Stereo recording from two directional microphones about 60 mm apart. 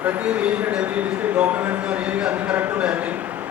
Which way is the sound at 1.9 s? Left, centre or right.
Centre.